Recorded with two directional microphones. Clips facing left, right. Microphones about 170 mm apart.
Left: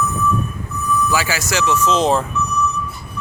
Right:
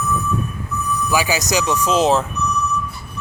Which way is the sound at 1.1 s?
15° right (ahead or behind).